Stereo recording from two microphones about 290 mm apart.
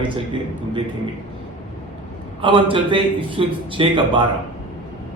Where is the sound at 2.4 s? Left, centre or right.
Centre.